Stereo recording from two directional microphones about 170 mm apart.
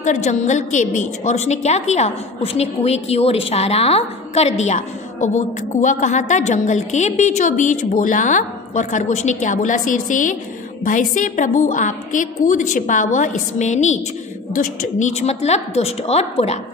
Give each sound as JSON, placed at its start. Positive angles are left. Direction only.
{"t": 0.0, "sound": "a woman's voice", "side_deg": 45}